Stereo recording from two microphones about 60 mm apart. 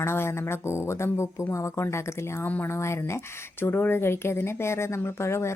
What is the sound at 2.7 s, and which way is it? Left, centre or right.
A woman's voice, left.